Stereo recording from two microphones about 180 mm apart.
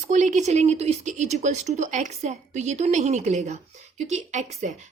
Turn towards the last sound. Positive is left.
turn(degrees=-40)  # may be behind; listen again after turning